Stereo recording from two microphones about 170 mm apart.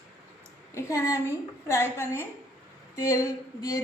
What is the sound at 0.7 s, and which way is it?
A woman's voice, 15° left (ahead or behind).